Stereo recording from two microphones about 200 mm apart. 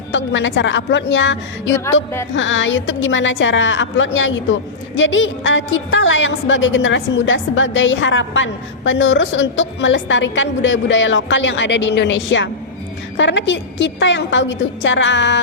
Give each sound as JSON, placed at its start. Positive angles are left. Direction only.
{"t": 0.1, "sound": "a woman's voice", "side_deg": 65}